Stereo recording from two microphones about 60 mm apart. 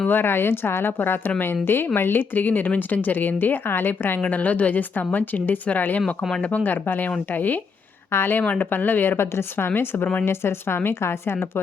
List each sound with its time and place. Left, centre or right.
0.1 s speech: left